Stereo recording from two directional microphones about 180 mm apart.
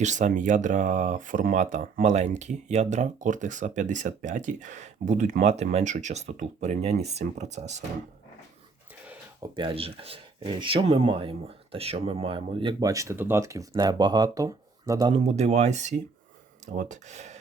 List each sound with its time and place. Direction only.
0.0 s speech: 40° right (ahead or behind)
9.6 s speech: 30° right (ahead or behind)
15.1 s speech: 40° right (ahead or behind)